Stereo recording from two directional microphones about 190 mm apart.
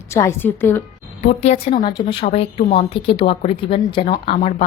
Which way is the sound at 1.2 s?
35° left (ahead or behind).